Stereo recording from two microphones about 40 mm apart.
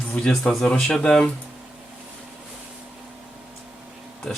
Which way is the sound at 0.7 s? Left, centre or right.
Left.